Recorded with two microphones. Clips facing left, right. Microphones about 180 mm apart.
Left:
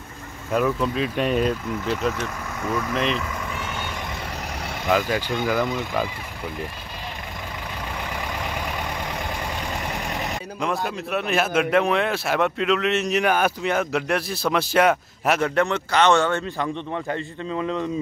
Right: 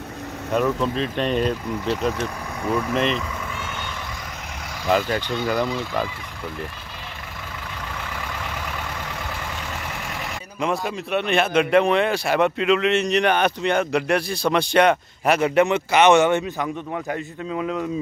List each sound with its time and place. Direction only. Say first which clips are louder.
0.6 s speech: even; 5° left (ahead or behind)
2.1 s speech: right 2 dB; 10° right (ahead or behind)
4.9 s a man's voice: right 1 dB; 5° left (ahead or behind)
8.5 s vehicle: left 2 dB; 15° left (ahead or behind)
9.8 s vehicle: left 3 dB; 20° left (ahead or behind)
10.6 s a man's voice: right 2 dB; centre (ahead or behind)